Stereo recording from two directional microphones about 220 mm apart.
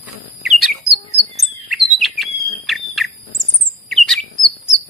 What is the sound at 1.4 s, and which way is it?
Bird, centre (ahead or behind).